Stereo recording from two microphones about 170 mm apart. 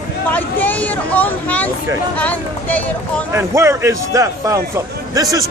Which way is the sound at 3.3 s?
15° right (ahead or behind).